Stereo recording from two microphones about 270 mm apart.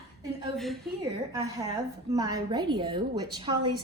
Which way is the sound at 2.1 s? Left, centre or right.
Centre.